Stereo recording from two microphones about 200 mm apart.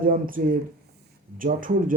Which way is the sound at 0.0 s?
45° right (ahead or behind).